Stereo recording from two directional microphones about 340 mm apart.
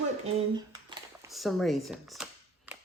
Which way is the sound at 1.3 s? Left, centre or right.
Centre.